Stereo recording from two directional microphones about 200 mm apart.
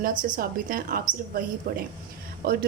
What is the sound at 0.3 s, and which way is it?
A woman's voice, 45° right (ahead or behind).